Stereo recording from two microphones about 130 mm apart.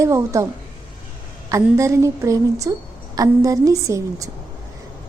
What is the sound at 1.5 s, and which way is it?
A woman's voice, 25° right (ahead or behind).